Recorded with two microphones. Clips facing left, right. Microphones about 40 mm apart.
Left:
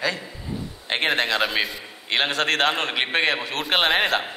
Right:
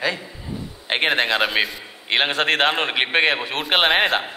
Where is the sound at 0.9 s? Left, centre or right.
Right.